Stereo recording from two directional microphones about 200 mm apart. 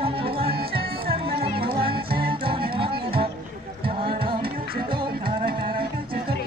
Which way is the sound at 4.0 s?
25° right (ahead or behind).